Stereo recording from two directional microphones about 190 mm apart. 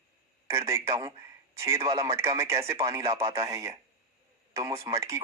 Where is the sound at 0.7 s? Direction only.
15° right (ahead or behind).